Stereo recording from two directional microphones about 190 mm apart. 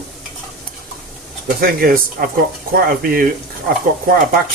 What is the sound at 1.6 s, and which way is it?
Speech, 50° right (ahead or behind).